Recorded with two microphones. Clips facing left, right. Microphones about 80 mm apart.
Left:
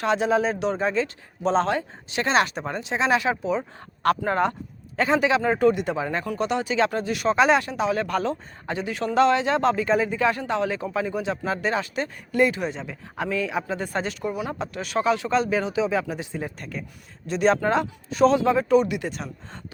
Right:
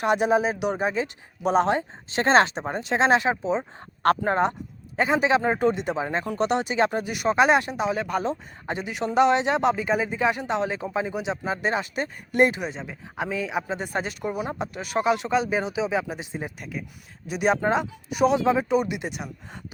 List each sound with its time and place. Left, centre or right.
0.0 s a man's voice: centre
2.1 s speech: right
2.6 s speech: right
4.9 s speech: centre
6.3 s speech: right
6.7 s a man's voice: right
14.2 s speech: right
14.6 s speech: centre
16.6 s a man's voice: centre